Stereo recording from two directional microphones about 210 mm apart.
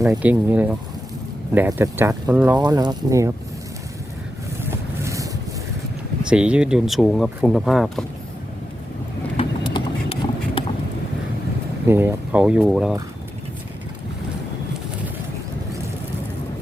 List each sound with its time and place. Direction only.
0.1 s speech: 10° right (ahead or behind)
2.6 s speech: 20° right (ahead or behind)
4.6 s vehicle: 15° right (ahead or behind)
6.2 s speech: 5° right (ahead or behind)
9.4 s vehicle: 30° left (ahead or behind)
9.7 s a sound: 25° left (ahead or behind)
11.9 s speech: 10° right (ahead or behind)